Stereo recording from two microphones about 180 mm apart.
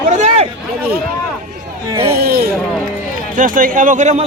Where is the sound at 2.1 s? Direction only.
60° right (ahead or behind).